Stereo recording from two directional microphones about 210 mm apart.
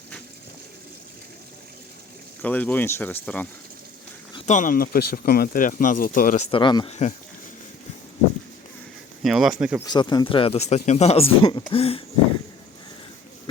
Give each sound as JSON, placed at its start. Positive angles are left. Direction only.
{"t": 2.4, "sound": "speech", "side_deg": 5}
{"t": 4.4, "sound": "speech", "side_deg": 35}
{"t": 9.2, "sound": "speech", "side_deg": 0}
{"t": 9.8, "sound": "speech", "side_deg": 20}